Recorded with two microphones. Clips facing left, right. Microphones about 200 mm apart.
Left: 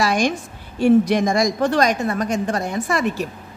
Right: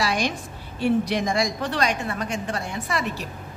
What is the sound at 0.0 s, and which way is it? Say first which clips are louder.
A woman's voice: left 6 dB; 45° left (ahead or behind).